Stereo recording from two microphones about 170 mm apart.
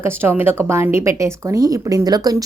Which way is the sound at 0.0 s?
15° right (ahead or behind).